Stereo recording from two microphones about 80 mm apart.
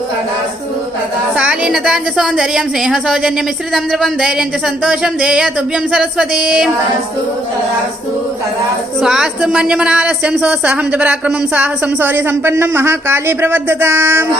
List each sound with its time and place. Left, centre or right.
1.4 s a woman's voice: centre
9.0 s a woman's voice: centre; by 14.3 s right